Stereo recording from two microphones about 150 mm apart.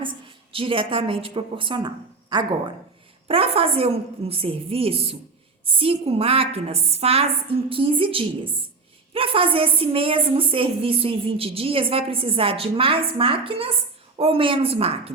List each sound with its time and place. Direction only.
0.5 s a woman's voice: 35° right (ahead or behind)
3.2 s a woman's voice: 40° right (ahead or behind)